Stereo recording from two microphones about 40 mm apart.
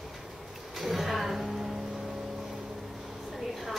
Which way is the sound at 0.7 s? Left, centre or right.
Centre.